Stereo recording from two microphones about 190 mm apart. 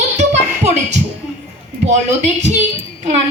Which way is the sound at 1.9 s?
40° right (ahead or behind).